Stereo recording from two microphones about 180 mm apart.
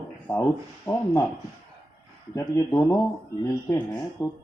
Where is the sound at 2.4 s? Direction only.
20° left (ahead or behind).